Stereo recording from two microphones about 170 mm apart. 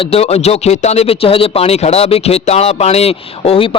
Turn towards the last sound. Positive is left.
turn(degrees=35)  # may be behind; listen again after turning